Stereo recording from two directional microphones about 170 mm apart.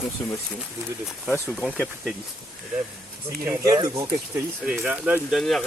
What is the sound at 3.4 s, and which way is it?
Speech, 15° right (ahead or behind).